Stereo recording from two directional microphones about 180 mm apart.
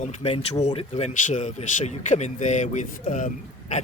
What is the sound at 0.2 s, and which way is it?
Speech, 35° left (ahead or behind).